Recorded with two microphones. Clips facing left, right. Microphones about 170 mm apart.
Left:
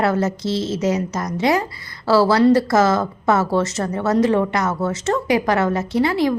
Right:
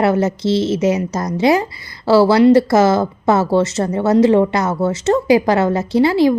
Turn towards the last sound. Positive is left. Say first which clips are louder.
# right 5 dB
turn(degrees=-30)  # may be behind; listen again after turning